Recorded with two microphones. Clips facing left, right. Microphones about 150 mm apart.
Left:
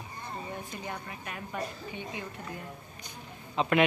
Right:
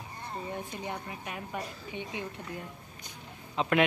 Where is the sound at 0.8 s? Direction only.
15° right (ahead or behind).